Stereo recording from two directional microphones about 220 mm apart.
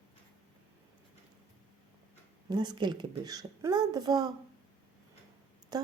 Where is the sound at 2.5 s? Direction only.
20° right (ahead or behind).